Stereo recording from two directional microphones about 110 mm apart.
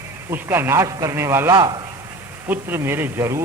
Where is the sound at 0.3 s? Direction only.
20° right (ahead or behind).